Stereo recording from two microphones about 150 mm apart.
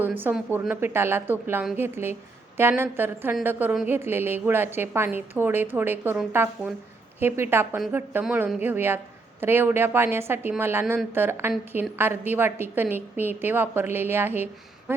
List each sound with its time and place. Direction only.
0.0 s a woman's voice: 15° right (ahead or behind)
8.2 s a woman's voice: 5° right (ahead or behind)